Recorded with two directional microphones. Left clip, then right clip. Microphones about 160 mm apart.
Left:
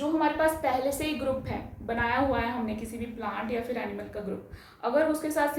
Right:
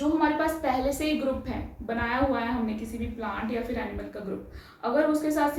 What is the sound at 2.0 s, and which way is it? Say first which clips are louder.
Speech: even; 25° left (ahead or behind).